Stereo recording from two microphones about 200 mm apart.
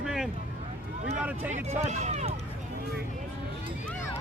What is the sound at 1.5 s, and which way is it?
Speech, 35° right (ahead or behind).